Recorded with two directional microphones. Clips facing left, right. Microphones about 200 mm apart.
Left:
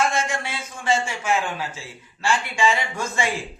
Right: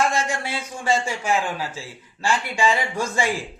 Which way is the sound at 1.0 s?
35° right (ahead or behind).